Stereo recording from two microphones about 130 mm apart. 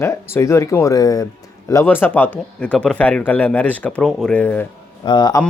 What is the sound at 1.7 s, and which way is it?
Speech, 15° left (ahead or behind).